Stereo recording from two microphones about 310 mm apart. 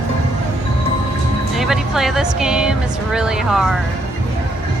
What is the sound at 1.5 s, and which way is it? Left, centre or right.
Music, centre.